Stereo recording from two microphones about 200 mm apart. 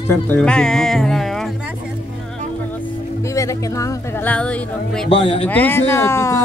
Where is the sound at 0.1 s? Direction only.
10° left (ahead or behind).